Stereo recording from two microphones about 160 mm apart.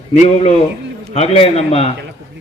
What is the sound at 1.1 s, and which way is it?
Speech, 40° left (ahead or behind).